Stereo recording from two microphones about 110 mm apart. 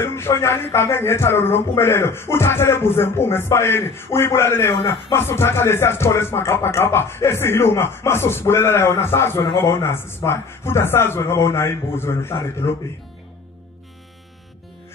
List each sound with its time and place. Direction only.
0.0 s speech: 25° left (ahead or behind)